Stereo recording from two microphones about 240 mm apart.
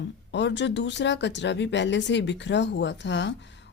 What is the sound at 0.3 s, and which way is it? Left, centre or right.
Speech, left.